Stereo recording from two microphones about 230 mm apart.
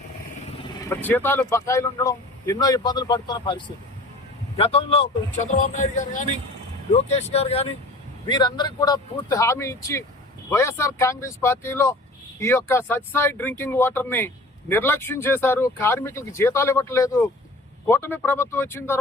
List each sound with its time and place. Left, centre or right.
0.7 s a man's voice: centre